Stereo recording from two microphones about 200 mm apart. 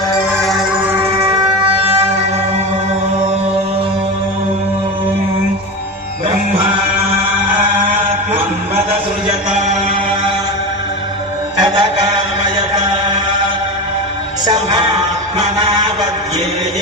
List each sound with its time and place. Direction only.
0.4 s music: centre (ahead or behind)
11.6 s mantra: 20° right (ahead or behind)
15.4 s vehicle: 20° right (ahead or behind)